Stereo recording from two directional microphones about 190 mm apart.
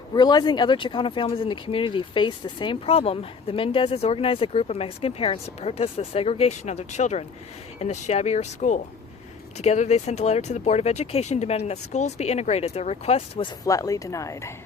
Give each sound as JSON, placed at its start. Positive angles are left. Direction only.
{"t": 0.1, "sound": "speech", "side_deg": 20}
{"t": 13.7, "sound": "a woman's voice", "side_deg": 15}